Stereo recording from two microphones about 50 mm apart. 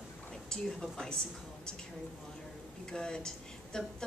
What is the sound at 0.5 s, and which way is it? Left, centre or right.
Speech, centre.